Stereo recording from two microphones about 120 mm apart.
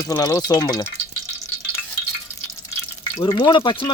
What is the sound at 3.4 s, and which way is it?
Speech, 40° left (ahead or behind).